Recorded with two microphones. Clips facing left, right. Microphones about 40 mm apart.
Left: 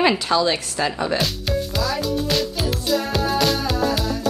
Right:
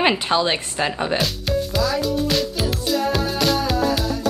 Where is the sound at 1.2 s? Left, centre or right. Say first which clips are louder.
Right 1 dB; centre.